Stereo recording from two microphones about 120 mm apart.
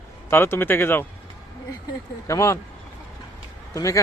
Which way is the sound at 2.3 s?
25° left (ahead or behind).